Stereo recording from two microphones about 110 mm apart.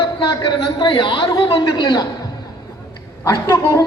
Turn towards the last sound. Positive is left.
turn(degrees=30)  # may be behind; listen again after turning